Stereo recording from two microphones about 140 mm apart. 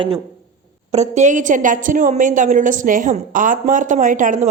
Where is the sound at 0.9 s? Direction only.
55° right (ahead or behind).